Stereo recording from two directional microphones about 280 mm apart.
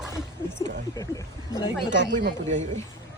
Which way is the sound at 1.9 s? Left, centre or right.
Right.